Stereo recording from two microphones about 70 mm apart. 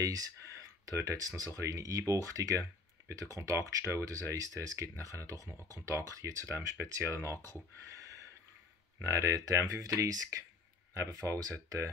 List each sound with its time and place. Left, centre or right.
0.0 s speech: right
7.4 s speech: right